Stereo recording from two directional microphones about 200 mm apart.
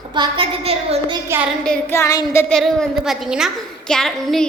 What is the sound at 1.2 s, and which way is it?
Child singing, 10° right (ahead or behind).